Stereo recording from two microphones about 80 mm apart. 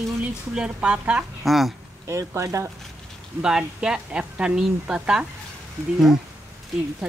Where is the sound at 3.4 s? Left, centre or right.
Centre.